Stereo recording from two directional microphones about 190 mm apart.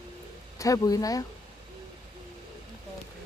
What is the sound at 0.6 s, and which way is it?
Speech, 20° left (ahead or behind).